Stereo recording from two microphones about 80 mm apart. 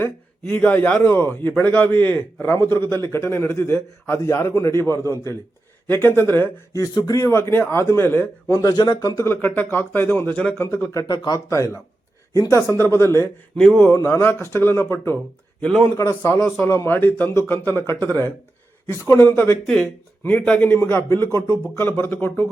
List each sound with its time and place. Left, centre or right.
0.5 s a man's voice: left
6.7 s a man's voice: left
7.3 s a man's voice: left
8.7 s a man's voice: left
9.2 s a man's voice: left
11.1 s speech: left
11.3 s a man's voice: left
13.6 s speech: centre
13.9 s a man's voice: left
15.6 s speech: centre
16.0 s a man's voice: left
16.9 s a man's voice: left
19.6 s a man's voice: centre